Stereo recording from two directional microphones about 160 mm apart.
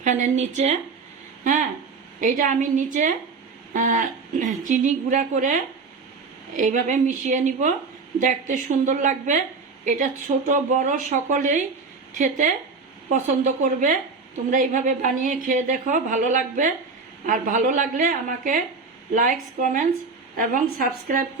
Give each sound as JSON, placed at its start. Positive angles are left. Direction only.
{"t": 0.0, "sound": "a woman's voice", "side_deg": -50}
{"t": 2.2, "sound": "a woman's voice", "side_deg": -55}